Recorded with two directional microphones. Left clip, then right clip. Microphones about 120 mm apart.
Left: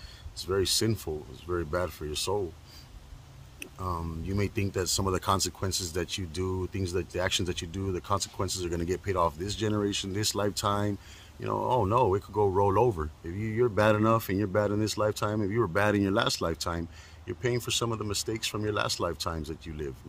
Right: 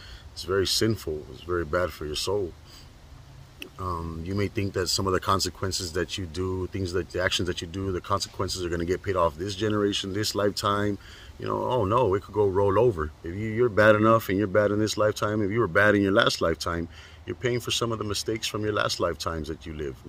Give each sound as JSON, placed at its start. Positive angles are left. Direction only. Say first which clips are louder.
{"t": 0.6, "sound": "speech", "louder": "right 3 dB", "side_deg": 20}
{"t": 4.3, "sound": "speech", "louder": "right 3 dB", "side_deg": 25}